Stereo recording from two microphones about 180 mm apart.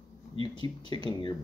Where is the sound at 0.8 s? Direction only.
25° left (ahead or behind).